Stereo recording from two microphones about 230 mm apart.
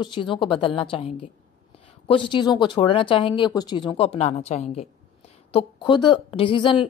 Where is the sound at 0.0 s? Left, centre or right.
Left.